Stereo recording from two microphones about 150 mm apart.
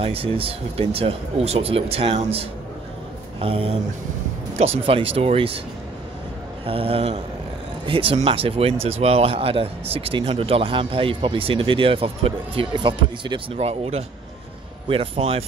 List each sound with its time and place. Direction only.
0.0 s speech: 40° right (ahead or behind)
6.6 s speech: 40° right (ahead or behind)